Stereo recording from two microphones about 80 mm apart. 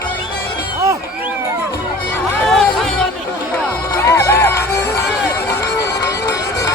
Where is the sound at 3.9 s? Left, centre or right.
Left.